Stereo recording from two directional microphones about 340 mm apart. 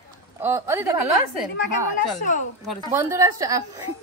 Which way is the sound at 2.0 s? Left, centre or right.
Left.